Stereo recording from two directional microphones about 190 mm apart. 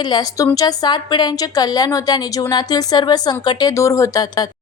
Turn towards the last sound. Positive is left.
turn(degrees=20)  # may be behind; listen again after turning